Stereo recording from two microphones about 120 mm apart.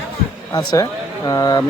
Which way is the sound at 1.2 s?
30° left (ahead or behind).